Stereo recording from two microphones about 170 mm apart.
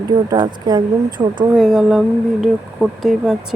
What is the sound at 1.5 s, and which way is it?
Speech, centre (ahead or behind).